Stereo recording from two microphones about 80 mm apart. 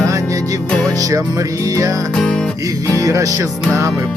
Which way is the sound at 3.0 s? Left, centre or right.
Right.